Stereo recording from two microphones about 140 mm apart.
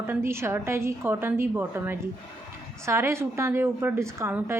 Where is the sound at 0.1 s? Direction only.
20° right (ahead or behind).